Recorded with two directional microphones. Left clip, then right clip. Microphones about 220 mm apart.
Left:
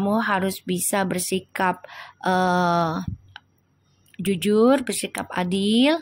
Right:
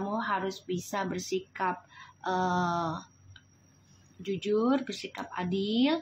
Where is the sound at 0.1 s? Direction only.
45° left (ahead or behind).